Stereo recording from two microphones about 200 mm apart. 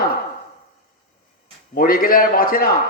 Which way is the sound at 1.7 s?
45° left (ahead or behind).